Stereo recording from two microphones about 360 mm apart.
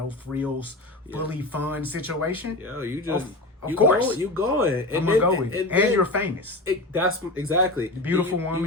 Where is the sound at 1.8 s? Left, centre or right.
Right.